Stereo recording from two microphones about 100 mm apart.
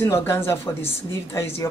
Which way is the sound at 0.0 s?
25° left (ahead or behind).